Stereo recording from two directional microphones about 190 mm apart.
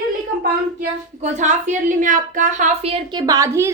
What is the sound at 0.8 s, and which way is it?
A woman's voice, 40° right (ahead or behind).